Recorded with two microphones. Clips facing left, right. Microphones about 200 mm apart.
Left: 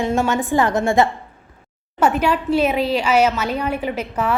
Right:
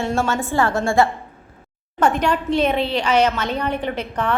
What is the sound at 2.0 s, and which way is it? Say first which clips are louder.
A woman's voice: left 1 dB; 5° left (ahead or behind).